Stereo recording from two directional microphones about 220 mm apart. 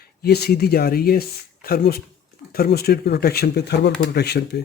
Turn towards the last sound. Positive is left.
turn(degrees=50)  # may be behind; listen again after turning